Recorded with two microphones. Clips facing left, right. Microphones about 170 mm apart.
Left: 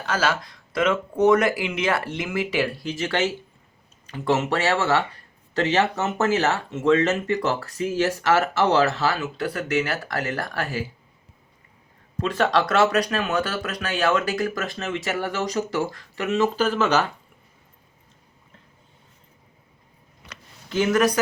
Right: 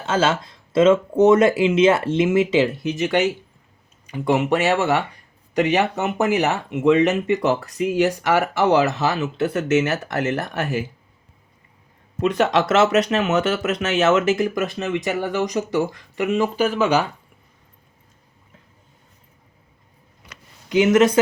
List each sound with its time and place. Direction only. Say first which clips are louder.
0.0 s speech: right 4 dB; 25° right (ahead or behind)
12.2 s speech: right 3 dB; 20° right (ahead or behind)
20.2 s a sound: left 1 dB; 15° right (ahead or behind)